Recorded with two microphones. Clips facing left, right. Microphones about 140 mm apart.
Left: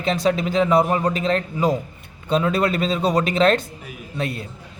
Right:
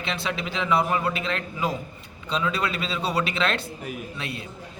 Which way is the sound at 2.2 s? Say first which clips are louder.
Left 7 dB; 50° left (ahead or behind).